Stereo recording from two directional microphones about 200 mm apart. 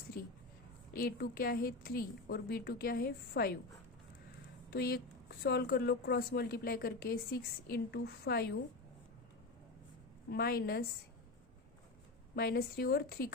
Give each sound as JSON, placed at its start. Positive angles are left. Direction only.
{"t": 0.9, "sound": "a woman's voice", "side_deg": 50}
{"t": 4.7, "sound": "a woman's voice", "side_deg": 50}
{"t": 10.2, "sound": "a woman's voice", "side_deg": 50}
{"t": 12.4, "sound": "a woman's voice", "side_deg": 50}